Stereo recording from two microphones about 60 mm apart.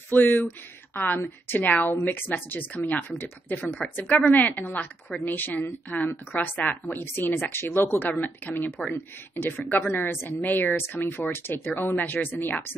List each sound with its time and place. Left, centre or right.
0.1 s speech: left
1.6 s a woman's voice: left
1.9 s a woman's voice: left